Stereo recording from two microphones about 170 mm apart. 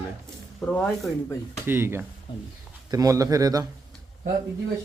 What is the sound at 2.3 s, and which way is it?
Speech, 30° left (ahead or behind).